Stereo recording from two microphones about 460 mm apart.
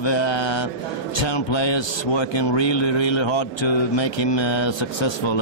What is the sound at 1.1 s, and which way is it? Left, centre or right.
A man's voice, left.